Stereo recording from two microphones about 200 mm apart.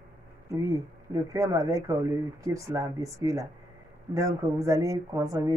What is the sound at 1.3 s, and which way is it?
A woman's voice, 15° right (ahead or behind).